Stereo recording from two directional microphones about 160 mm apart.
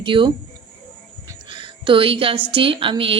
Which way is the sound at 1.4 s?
30° right (ahead or behind).